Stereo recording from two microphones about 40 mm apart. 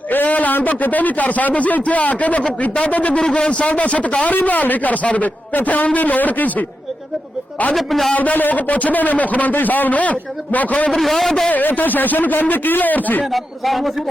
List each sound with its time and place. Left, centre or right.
0.3 s speech: left
3.2 s a man's voice: centre
3.5 s a man's voice: left
7.8 s speech: centre
8.1 s a man's voice: left
10.9 s a man's voice: centre
11.5 s a man's voice: left
13.3 s speech: centre